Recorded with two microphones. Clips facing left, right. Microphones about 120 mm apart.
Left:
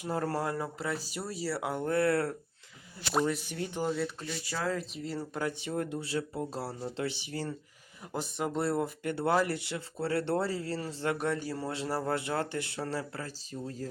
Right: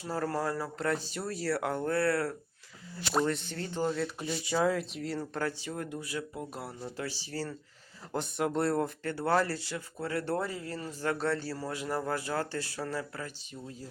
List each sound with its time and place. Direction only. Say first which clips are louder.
0.0 s speech: even; 25° left (ahead or behind)
0.8 s speech: right 3 dB; 5° left (ahead or behind)
1.8 s speech: left 4 dB; 20° left (ahead or behind)
3.1 s speech: even; 5° left (ahead or behind)
4.2 s speech: right 6 dB; 15° right (ahead or behind)
4.8 s speech: right 2 dB; centre (ahead or behind)
5.4 s speech: left 5 dB; 20° left (ahead or behind)
8.1 s speech: right 2 dB; centre (ahead or behind)
9.0 s speech: left 1 dB; 20° left (ahead or behind); by 13.8 s 40° left (ahead or behind)